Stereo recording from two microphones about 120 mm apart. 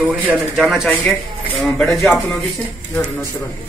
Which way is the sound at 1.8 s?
Centre (ahead or behind).